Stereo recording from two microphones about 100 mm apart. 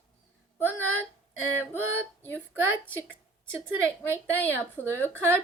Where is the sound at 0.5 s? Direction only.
20° left (ahead or behind).